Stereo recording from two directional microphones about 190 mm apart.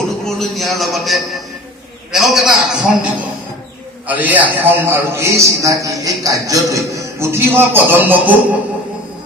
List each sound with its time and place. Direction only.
0.3 s a man's voice: centre (ahead or behind)